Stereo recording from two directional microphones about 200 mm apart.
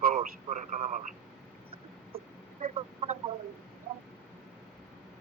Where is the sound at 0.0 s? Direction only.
40° right (ahead or behind).